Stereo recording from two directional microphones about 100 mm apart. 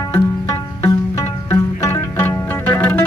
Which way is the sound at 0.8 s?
30° left (ahead or behind).